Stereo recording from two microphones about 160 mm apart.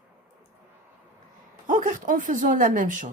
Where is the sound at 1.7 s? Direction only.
55° right (ahead or behind).